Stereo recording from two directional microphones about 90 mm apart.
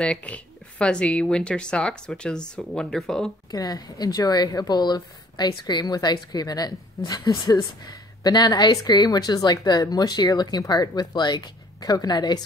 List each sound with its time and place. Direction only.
0.0 s speech: 10° left (ahead or behind)
3.5 s a woman's voice: 45° left (ahead or behind)